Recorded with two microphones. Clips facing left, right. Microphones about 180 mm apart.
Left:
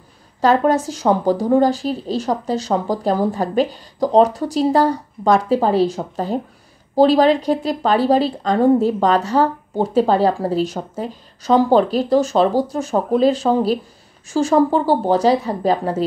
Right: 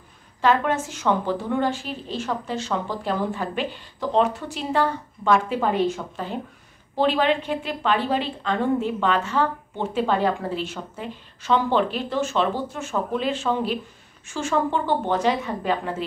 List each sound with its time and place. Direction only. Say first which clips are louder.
0.4 s a woman's voice: left 6 dB; 40° left (ahead or behind)